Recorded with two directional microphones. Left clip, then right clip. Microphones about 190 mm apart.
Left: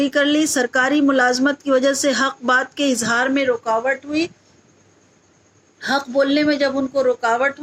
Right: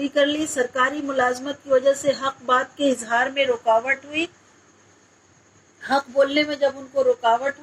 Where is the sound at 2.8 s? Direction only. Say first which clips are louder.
Left 2 dB; 40° left (ahead or behind); by 4.3 s 25° left (ahead or behind).